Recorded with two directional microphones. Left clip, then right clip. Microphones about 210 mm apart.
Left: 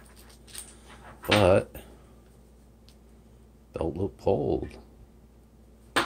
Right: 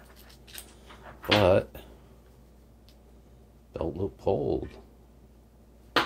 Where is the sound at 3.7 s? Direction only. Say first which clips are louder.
Left 1 dB; 15° left (ahead or behind).